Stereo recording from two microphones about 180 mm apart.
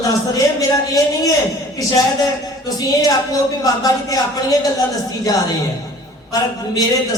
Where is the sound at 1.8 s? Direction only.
20° left (ahead or behind).